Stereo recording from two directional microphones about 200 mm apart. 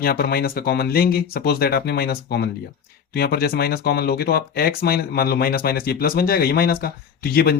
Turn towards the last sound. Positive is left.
turn(degrees=50)  # may be behind; listen again after turning